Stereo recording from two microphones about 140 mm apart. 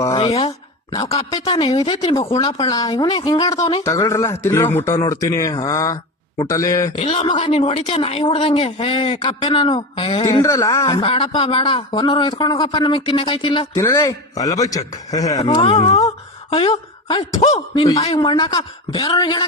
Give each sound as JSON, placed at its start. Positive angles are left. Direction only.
{"t": 0.2, "sound": "a sound", "side_deg": 45}
{"t": 0.9, "sound": "speech", "side_deg": 25}
{"t": 6.9, "sound": "speech", "side_deg": 50}
{"t": 10.2, "sound": "speech", "side_deg": 25}
{"t": 11.0, "sound": "speech", "side_deg": 40}
{"t": 13.7, "sound": "speech", "side_deg": 20}
{"t": 15.4, "sound": "speech", "side_deg": 45}
{"t": 17.4, "sound": "speech", "side_deg": 50}